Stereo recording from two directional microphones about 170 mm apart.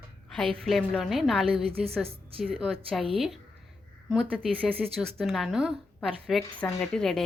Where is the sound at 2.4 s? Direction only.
Centre (ahead or behind).